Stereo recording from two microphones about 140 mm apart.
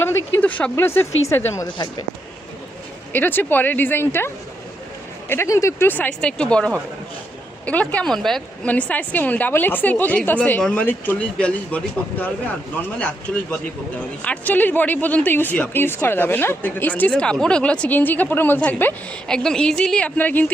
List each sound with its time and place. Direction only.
0.0 s a woman's voice: 15° left (ahead or behind)
1.6 s speech: 30° left (ahead or behind)
3.1 s speech: 15° left (ahead or behind)
5.3 s speech: 20° left (ahead or behind)
13.0 s speech: 10° left (ahead or behind)